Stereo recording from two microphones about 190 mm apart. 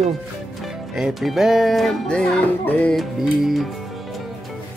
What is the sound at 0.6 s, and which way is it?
Music, centre (ahead or behind).